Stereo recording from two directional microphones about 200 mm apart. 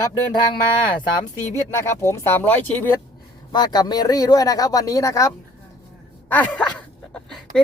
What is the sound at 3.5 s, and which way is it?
Speech, 20° left (ahead or behind).